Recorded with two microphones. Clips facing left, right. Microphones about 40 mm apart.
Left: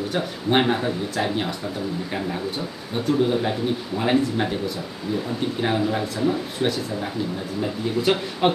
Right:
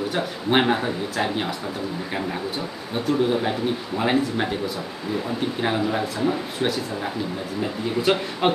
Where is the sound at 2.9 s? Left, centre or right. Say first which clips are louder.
Left 1 dB; centre.